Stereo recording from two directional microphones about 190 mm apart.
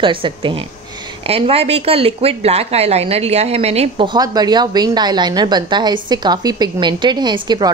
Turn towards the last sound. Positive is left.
turn(degrees=-20)  # may be behind; listen again after turning